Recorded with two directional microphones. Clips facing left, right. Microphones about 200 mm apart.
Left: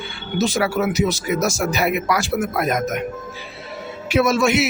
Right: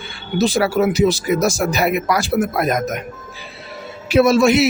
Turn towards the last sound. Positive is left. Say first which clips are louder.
# right 4 dB
turn(degrees=-35)  # may be behind; listen again after turning